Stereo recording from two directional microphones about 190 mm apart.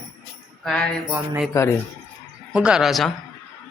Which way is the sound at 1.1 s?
10° right (ahead or behind).